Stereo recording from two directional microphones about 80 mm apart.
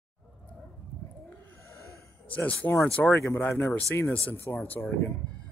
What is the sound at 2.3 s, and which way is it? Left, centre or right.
Speech, centre.